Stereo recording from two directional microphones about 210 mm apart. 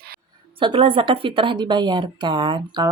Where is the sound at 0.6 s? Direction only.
25° right (ahead or behind).